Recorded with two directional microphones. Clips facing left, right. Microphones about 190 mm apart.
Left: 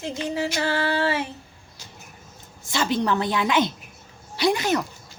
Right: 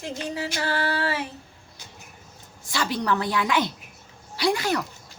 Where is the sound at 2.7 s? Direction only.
25° left (ahead or behind).